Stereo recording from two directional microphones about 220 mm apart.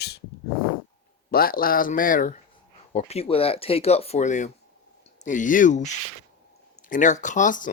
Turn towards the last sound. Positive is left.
turn(degrees=35)  # may be behind; listen again after turning